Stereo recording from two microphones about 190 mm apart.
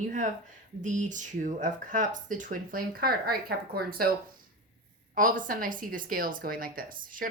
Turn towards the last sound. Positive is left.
turn(degrees=-45)  # may be behind; listen again after turning